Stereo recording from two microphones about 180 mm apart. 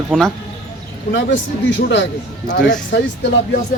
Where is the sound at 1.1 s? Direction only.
85° left.